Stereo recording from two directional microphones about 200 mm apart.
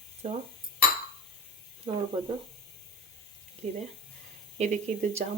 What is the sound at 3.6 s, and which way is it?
Speech, 35° right (ahead or behind).